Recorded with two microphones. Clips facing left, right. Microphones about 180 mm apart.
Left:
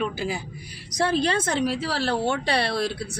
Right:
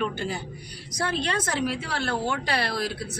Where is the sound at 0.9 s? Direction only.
30° left (ahead or behind).